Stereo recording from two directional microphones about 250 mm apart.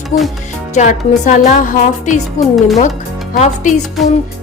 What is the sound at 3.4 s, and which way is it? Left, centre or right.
Music, left.